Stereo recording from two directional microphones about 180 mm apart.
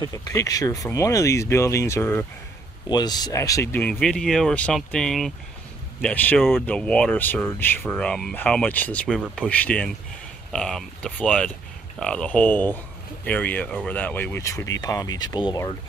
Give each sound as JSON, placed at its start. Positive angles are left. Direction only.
{"t": 0.1, "sound": "speech", "side_deg": 20}